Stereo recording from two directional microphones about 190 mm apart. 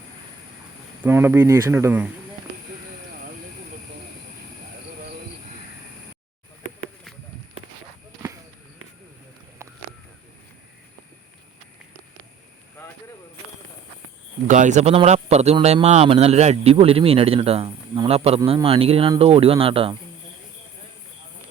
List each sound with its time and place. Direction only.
1.0 s speech: 10° right (ahead or behind)
12.8 s a sound: 10° left (ahead or behind)
14.4 s speech: 40° right (ahead or behind)